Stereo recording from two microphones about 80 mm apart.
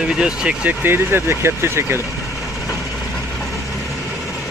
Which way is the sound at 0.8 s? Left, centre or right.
Right.